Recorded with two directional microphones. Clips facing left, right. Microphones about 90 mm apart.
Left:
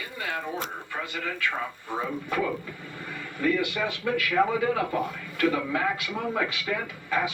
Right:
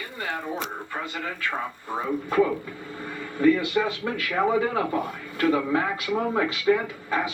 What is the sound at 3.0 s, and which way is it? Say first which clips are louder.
A man's voice: right 7 dB; 30° right (ahead or behind).